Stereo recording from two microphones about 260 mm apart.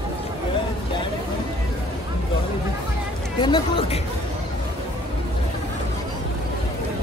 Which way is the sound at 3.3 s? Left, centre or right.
Centre.